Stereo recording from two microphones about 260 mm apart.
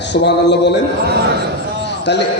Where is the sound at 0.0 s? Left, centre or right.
Left.